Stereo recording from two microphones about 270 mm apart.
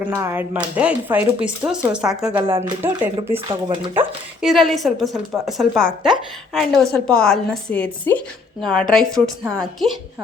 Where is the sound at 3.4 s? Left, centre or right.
Centre.